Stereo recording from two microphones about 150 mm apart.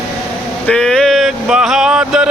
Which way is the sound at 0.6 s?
5° left (ahead or behind).